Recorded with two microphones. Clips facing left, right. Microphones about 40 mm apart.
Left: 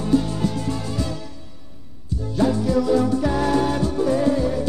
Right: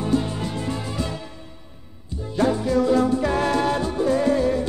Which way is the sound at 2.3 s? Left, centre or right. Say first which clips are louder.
Even; right.